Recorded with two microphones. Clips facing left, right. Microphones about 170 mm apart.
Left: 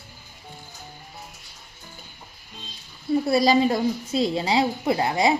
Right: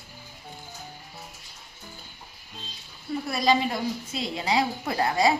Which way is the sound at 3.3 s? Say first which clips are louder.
Left 4 dB; 35° left (ahead or behind).